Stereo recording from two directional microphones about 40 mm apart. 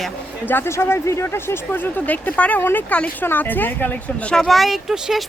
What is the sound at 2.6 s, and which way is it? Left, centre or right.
Speech, left.